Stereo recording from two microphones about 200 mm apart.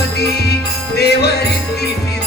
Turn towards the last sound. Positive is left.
turn(degrees=55)  # may be behind; listen again after turning